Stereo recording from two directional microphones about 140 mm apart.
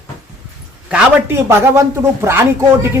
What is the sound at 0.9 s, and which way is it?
Speech, 15° right (ahead or behind).